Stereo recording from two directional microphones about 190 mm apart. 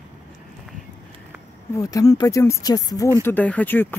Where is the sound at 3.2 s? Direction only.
10° left (ahead or behind).